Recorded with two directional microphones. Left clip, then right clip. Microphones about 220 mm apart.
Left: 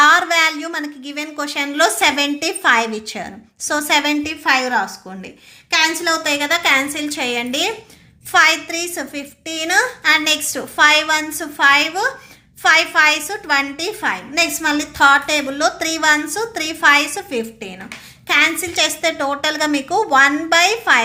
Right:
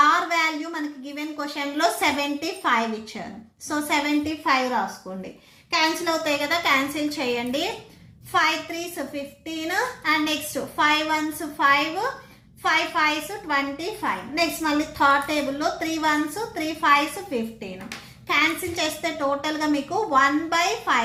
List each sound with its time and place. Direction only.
0.0 s a sound: 55° left (ahead or behind)
3.7 s a woman's voice: 55° left (ahead or behind)
5.7 s a woman's voice: 50° left (ahead or behind)